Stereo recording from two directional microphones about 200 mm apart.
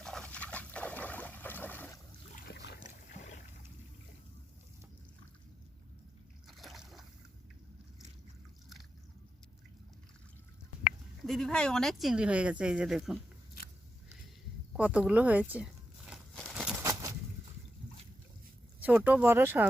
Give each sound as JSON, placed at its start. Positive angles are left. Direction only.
{"t": 0.0, "sound": "dog", "side_deg": 5}
{"t": 2.3, "sound": "boat", "side_deg": 55}
{"t": 2.8, "sound": "boat", "side_deg": 35}
{"t": 6.5, "sound": "boat", "side_deg": 0}
{"t": 11.3, "sound": "speech", "side_deg": 0}
{"t": 14.8, "sound": "crumpling", "side_deg": -5}
{"t": 16.8, "sound": "a sound", "side_deg": -15}
{"t": 18.8, "sound": "speech", "side_deg": -10}